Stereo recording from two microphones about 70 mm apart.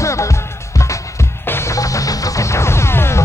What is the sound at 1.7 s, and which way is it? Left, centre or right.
Music, left.